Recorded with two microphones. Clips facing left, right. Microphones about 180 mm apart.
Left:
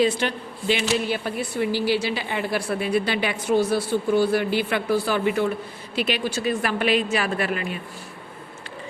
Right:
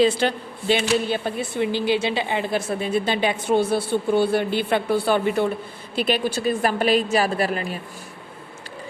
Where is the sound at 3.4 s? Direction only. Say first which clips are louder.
Even; 55° right (ahead or behind).